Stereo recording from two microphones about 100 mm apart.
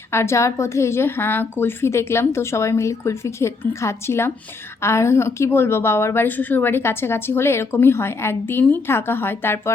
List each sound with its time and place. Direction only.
0.1 s a woman's voice: 25° left (ahead or behind)